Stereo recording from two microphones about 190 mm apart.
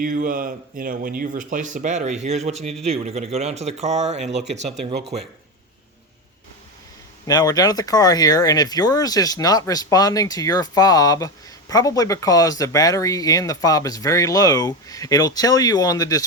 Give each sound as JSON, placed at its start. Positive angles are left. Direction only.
{"t": 0.0, "sound": "speech", "side_deg": -45}
{"t": 7.3, "sound": "speech", "side_deg": 20}